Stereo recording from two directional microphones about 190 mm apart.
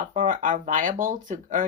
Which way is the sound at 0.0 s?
40° right (ahead or behind).